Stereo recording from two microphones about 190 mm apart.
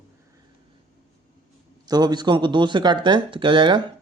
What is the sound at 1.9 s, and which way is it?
Speech, 20° right (ahead or behind).